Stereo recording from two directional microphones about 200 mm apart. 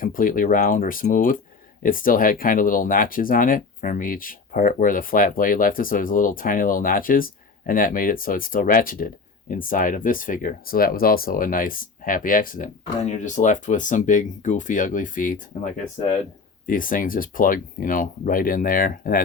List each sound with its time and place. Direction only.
0.0 s speech: 45° left (ahead or behind)